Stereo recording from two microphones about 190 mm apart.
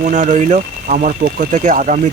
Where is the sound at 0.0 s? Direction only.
40° right (ahead or behind).